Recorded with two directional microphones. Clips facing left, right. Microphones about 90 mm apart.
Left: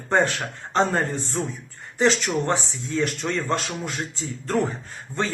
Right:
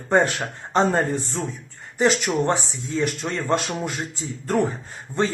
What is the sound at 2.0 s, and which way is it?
Speech, 15° right (ahead or behind).